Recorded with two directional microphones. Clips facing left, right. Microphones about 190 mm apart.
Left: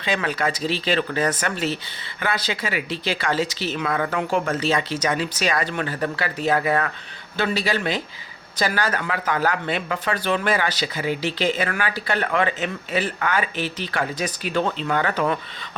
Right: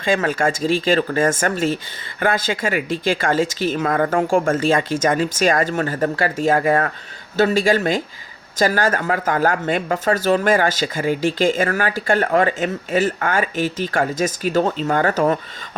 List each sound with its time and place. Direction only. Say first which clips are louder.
0.0 s speech: right 5 dB; 45° right (ahead or behind)